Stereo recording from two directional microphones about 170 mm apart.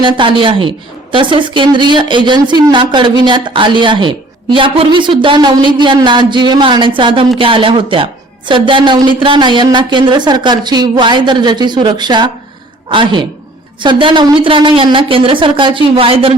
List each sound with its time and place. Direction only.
0.0 s a woman's voice: 30° right (ahead or behind)